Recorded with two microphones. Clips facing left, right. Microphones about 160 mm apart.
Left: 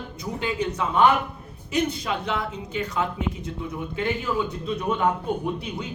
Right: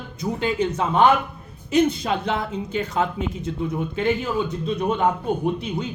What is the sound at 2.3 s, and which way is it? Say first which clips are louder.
Speech: right 3 dB; 25° right (ahead or behind).